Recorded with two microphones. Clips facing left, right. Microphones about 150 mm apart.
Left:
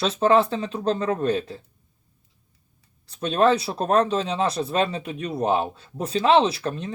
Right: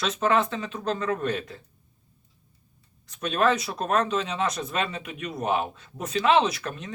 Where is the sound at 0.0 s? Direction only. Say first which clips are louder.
Left 5 dB; 30° left (ahead or behind).